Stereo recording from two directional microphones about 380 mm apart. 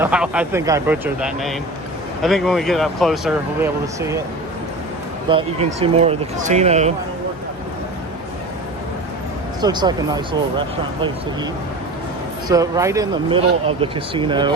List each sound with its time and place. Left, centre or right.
0.0 s speech: centre
5.3 s speech: centre
9.6 s speech: centre
12.5 s speech: centre